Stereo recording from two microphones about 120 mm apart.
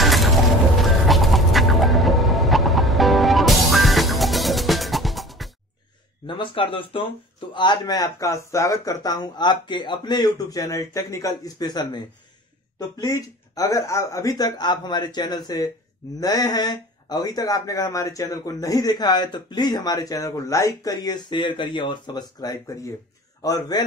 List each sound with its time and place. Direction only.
0.0 s mechanisms: centre (ahead or behind)
0.7 s chicken: centre (ahead or behind)
6.2 s speech: 45° left (ahead or behind)